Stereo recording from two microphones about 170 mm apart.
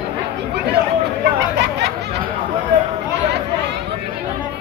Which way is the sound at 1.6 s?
75° right (ahead or behind).